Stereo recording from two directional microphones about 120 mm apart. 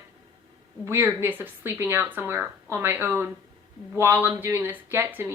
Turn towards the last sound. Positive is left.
turn(degrees=-15)  # may be behind; listen again after turning